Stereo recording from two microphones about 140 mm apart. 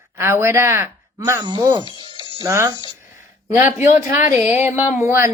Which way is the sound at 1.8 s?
35° left (ahead or behind).